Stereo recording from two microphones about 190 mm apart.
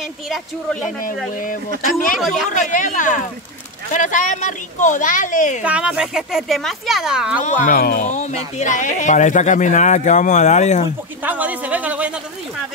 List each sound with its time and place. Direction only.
2.1 s speech: centre (ahead or behind)
2.4 s speech: 40° left (ahead or behind)
5.6 s speech: 5° right (ahead or behind)
7.4 s speech: 45° left (ahead or behind)
11.2 s a man's voice: 10° right (ahead or behind)